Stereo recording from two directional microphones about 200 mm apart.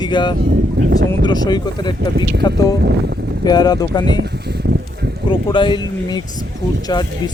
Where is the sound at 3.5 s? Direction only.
20° left (ahead or behind).